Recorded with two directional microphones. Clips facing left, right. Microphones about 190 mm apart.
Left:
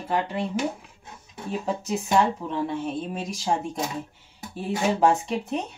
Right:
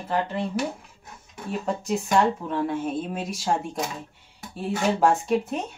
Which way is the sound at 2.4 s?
5° right (ahead or behind).